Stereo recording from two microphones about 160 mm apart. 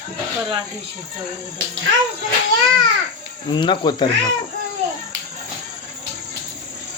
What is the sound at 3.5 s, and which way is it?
Speech, 30° left (ahead or behind).